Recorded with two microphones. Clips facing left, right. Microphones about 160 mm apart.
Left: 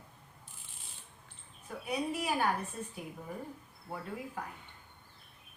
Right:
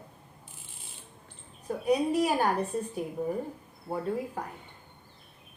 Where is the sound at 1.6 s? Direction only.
40° right (ahead or behind).